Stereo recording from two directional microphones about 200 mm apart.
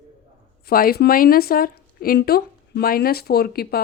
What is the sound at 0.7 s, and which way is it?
Speech, 50° left (ahead or behind).